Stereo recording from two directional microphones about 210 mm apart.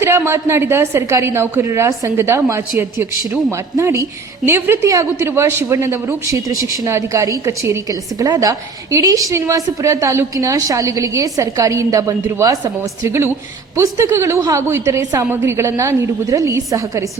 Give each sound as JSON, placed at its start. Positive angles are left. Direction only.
{"t": 0.0, "sound": "a woman's voice", "side_deg": -10}